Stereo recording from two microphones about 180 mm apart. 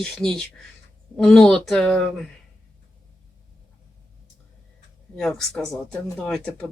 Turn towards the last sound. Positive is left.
turn(degrees=5)  # may be behind; listen again after turning